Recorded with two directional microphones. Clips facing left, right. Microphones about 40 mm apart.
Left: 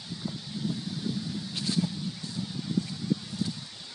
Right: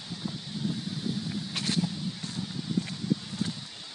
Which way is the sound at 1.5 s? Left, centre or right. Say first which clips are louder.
Right 1 dB; right.